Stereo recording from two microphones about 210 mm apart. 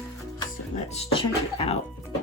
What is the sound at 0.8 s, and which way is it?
Speech, 30° left (ahead or behind).